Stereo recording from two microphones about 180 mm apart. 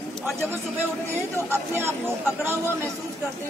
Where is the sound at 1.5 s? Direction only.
15° right (ahead or behind).